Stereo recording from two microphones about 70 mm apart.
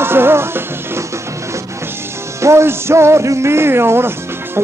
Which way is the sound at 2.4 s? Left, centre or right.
Right.